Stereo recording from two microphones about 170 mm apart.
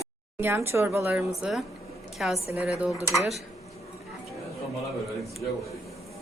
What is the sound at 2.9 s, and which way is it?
Speech, 15° left (ahead or behind).